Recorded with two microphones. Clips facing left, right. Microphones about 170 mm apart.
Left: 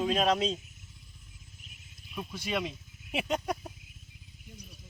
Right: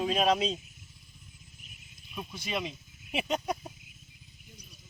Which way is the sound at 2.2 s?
Centre (ahead or behind).